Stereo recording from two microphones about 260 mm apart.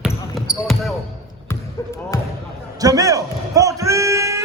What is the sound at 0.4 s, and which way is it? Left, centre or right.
Basketball bounce, centre.